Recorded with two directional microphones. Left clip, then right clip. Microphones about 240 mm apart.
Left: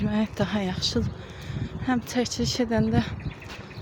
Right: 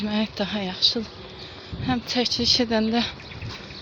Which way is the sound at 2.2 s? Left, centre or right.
Centre.